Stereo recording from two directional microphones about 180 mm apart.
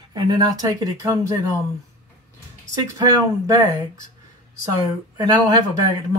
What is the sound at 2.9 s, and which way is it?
Speech, 20° right (ahead or behind).